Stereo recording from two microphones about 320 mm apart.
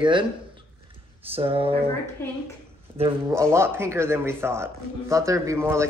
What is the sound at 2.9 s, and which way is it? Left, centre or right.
A man's voice, centre.